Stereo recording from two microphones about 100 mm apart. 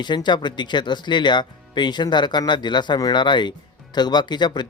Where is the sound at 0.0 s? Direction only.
50° left (ahead or behind).